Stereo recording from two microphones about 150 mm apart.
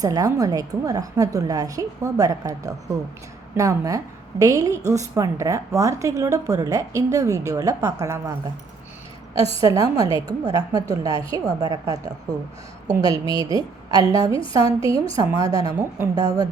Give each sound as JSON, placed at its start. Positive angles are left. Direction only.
{"t": 0.0, "sound": "a woman's voice", "side_deg": -25}
{"t": 9.6, "sound": "a woman's voice", "side_deg": -25}